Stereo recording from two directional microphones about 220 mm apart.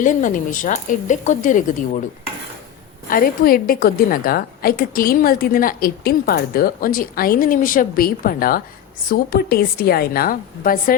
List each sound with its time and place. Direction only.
0.0 s a woman's voice: 35° left (ahead or behind)
3.1 s a woman's voice: 40° left (ahead or behind)